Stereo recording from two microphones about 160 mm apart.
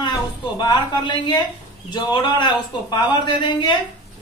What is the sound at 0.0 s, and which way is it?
A woman's voice, 25° left (ahead or behind).